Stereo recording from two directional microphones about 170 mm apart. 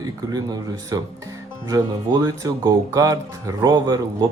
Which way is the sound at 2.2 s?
20° right (ahead or behind).